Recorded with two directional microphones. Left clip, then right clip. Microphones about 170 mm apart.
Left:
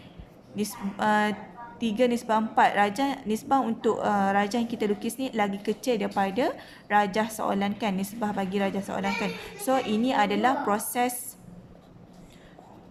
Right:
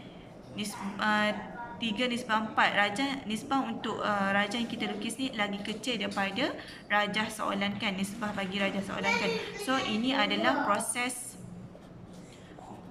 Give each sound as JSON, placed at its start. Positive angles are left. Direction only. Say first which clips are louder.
{"t": 0.5, "sound": "speech", "louder": "left 4 dB", "side_deg": 35}